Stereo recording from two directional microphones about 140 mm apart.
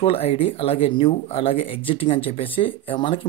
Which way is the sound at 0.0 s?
45° left (ahead or behind).